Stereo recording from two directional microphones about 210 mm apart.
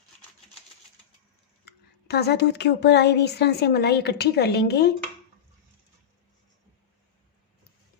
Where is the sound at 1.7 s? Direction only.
50° left (ahead or behind).